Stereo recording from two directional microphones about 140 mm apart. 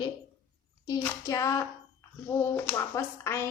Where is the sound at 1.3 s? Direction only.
20° left (ahead or behind).